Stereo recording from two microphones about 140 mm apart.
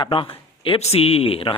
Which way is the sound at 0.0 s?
40° left (ahead or behind).